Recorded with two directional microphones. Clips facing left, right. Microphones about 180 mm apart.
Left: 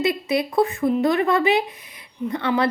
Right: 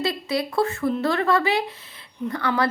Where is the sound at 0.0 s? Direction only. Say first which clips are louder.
Left 3 dB; 20° left (ahead or behind).